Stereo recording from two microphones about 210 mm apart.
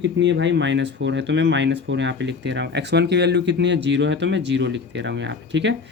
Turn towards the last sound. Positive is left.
turn(degrees=-60)  # may be behind; listen again after turning